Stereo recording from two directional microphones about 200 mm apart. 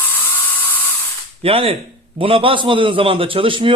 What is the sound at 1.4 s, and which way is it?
A man's voice, 30° right (ahead or behind).